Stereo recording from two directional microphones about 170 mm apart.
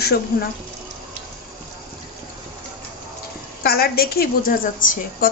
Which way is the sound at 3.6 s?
65° left (ahead or behind).